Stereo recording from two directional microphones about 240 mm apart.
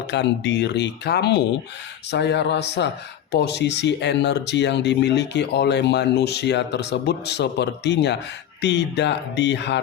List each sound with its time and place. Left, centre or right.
0.1 s speech: left